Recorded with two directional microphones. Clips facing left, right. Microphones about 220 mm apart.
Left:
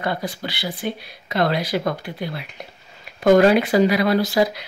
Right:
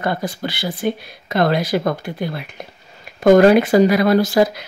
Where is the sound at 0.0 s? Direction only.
45° right (ahead or behind).